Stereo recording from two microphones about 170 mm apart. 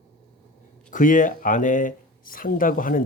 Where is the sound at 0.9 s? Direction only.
50° left (ahead or behind).